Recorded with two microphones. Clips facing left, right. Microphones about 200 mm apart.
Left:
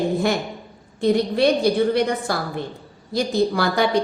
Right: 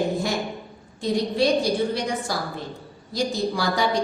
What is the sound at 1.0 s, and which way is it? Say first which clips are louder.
A woman's voice: left 4 dB; 60° left (ahead or behind).